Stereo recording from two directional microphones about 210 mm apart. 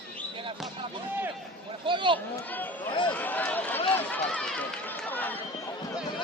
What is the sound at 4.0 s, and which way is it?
Run, 5° left (ahead or behind).